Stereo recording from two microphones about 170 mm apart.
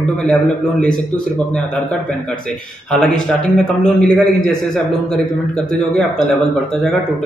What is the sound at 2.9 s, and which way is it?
A man's voice, 5° left (ahead or behind).